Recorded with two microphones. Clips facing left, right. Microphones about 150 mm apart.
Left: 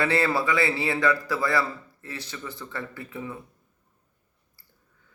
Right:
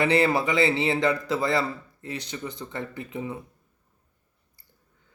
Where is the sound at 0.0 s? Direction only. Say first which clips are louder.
Right 2 dB; 20° right (ahead or behind).